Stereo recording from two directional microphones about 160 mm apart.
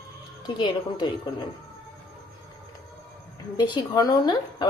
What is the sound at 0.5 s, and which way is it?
Speech, 30° left (ahead or behind).